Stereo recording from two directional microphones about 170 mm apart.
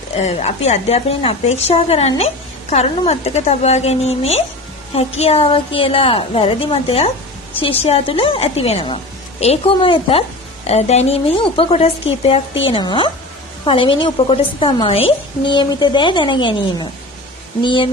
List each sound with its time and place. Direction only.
0.2 s a woman's voice: 40° left (ahead or behind)